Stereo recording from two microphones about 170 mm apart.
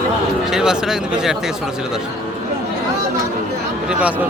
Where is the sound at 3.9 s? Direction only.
10° right (ahead or behind).